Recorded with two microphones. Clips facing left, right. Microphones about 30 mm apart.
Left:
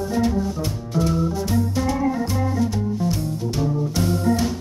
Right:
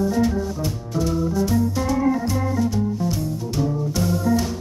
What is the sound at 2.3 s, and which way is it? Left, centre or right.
Music, centre.